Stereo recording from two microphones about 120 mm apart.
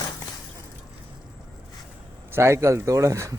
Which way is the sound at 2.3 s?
20° right (ahead or behind).